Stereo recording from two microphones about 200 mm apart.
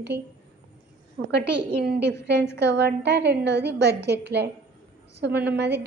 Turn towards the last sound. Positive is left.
turn(degrees=-60)  # may be behind; listen again after turning